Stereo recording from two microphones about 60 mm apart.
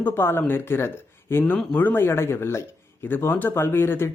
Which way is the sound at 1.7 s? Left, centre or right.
Left.